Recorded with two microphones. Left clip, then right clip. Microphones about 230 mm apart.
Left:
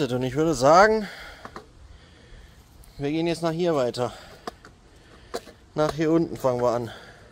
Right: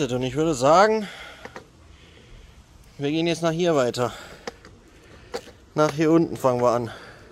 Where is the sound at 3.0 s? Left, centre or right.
Centre.